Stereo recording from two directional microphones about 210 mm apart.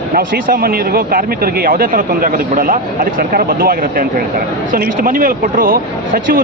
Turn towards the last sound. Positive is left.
turn(degrees=-40)  # may be behind; listen again after turning